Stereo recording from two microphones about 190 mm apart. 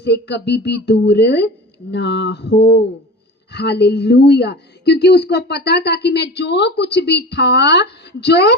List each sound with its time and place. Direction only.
0.0 s speech: 65° left (ahead or behind)